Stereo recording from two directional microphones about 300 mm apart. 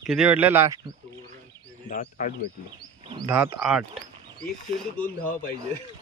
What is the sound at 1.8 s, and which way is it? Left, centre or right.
Speech, left.